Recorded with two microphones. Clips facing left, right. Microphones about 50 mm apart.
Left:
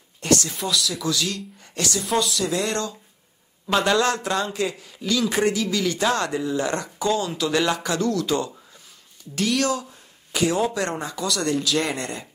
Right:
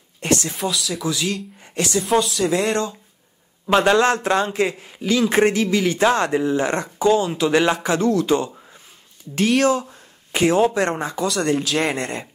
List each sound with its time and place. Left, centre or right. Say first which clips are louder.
0.2 s speech: right 1 dB; right
0.7 s speech: right 1 dB; centre
1.1 s speech: right 2 dB; right
3.6 s a man's voice: right 4 dB; right
9.5 s a man's voice: right 6 dB; right